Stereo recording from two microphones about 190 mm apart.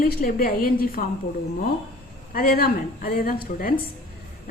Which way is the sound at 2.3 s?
50° left (ahead or behind).